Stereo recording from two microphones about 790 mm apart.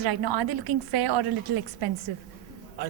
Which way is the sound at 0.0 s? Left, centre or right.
Right.